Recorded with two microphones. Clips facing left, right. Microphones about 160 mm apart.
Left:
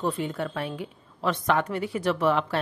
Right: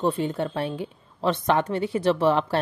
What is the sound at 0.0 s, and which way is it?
A woman's voice, 30° right (ahead or behind).